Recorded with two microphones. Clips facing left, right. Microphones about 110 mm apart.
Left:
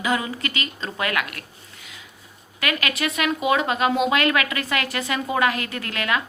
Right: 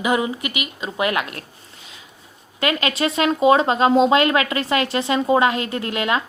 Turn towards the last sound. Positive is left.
turn(degrees=-20)  # may be behind; listen again after turning